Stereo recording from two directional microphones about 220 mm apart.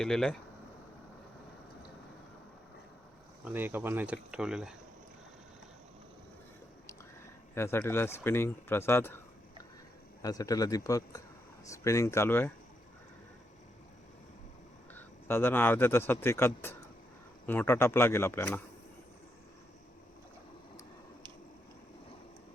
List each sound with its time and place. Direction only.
0.0 s speech: 5° left (ahead or behind)
3.4 s speech: 10° right (ahead or behind)
7.5 s speech: 10° left (ahead or behind)
10.2 s speech: 15° left (ahead or behind)
14.9 s speech: 10° left (ahead or behind)